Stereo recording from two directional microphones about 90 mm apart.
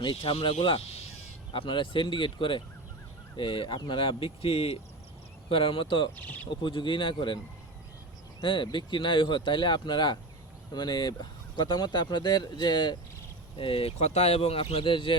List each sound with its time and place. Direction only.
0.0 s speech: 75° left (ahead or behind); by 4.8 s 90° left
5.5 s speech: 80° left
6.1 s speech: 20° left (ahead or behind)
6.5 s speech: 65° left (ahead or behind)
8.4 s speech: 65° left (ahead or behind)
13.6 s speech: 90° left; by 15.1 s 75° left (ahead or behind)